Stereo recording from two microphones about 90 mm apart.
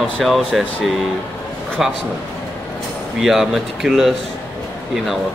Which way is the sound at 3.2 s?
5° right (ahead or behind).